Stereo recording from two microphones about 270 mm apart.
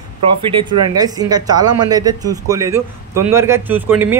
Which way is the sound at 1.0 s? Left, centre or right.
Centre.